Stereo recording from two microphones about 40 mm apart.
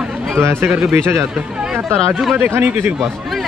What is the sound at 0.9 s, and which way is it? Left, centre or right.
Speech, right.